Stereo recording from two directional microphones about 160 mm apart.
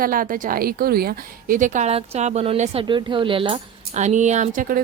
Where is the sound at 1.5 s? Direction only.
50° right (ahead or behind).